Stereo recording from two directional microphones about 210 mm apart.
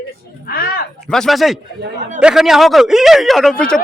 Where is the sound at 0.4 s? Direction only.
45° left (ahead or behind).